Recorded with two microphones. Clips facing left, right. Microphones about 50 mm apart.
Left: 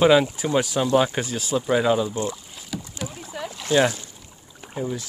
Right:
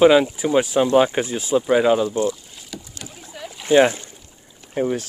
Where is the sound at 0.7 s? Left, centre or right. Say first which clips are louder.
Right 5 dB; right.